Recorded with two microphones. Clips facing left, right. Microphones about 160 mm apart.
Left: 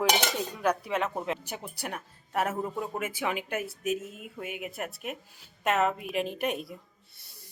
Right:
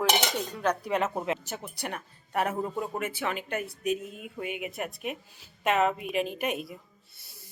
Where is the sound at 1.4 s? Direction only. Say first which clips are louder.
Right 1 dB; 10° left (ahead or behind).